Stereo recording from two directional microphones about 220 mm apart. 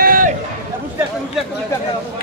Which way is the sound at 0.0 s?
40° right (ahead or behind).